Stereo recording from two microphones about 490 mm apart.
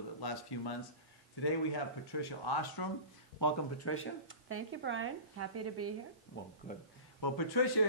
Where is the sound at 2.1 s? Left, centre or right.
Left.